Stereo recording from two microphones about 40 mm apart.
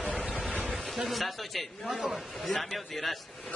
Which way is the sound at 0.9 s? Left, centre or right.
Centre.